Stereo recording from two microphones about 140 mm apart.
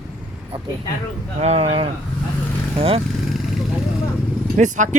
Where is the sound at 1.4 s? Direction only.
45° right (ahead or behind).